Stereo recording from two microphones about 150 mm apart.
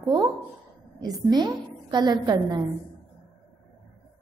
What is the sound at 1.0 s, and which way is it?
A woman's voice, 25° right (ahead or behind).